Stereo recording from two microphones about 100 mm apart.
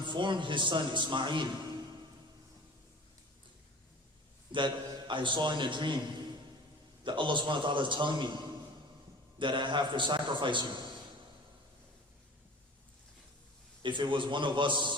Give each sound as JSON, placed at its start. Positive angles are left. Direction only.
{"t": 0.0, "sound": "a man's voice", "side_deg": -50}
{"t": 4.5, "sound": "a man's voice", "side_deg": -50}
{"t": 7.0, "sound": "a man's voice", "side_deg": -55}
{"t": 9.4, "sound": "a man's voice", "side_deg": -50}
{"t": 13.8, "sound": "a man's voice", "side_deg": -50}